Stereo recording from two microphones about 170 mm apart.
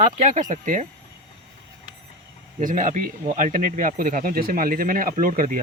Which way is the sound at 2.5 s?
50° right (ahead or behind).